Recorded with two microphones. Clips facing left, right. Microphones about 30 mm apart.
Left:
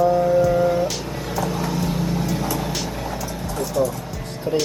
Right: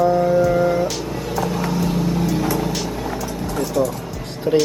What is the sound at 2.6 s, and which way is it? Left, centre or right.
Music, centre.